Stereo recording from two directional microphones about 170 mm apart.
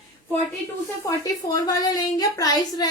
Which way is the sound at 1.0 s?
20° left (ahead or behind).